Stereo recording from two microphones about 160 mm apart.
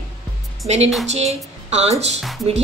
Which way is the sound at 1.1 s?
45° right (ahead or behind).